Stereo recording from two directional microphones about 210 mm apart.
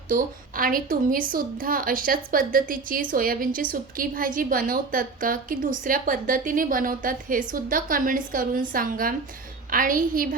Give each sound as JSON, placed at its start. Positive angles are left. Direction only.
{"t": 0.1, "sound": "a woman's voice", "side_deg": -40}